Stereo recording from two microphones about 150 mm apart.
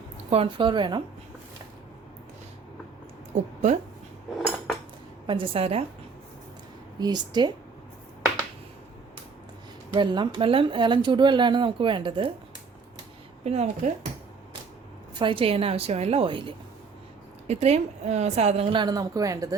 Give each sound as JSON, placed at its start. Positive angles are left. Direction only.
{"t": 0.3, "sound": "speech", "side_deg": -40}
{"t": 3.3, "sound": "speech", "side_deg": -50}
{"t": 5.2, "sound": "speech", "side_deg": -35}
{"t": 7.0, "sound": "speech", "side_deg": -30}
{"t": 9.9, "sound": "speech", "side_deg": -30}
{"t": 13.4, "sound": "speech", "side_deg": -45}
{"t": 15.1, "sound": "speech", "side_deg": -35}
{"t": 17.5, "sound": "speech", "side_deg": -45}